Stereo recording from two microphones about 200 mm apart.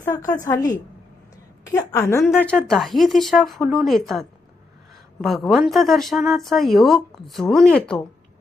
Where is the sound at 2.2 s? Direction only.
5° left (ahead or behind).